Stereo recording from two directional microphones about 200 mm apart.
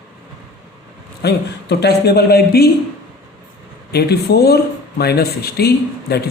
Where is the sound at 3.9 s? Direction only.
55° left (ahead or behind).